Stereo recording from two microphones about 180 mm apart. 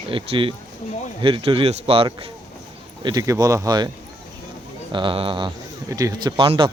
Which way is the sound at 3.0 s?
20° right (ahead or behind).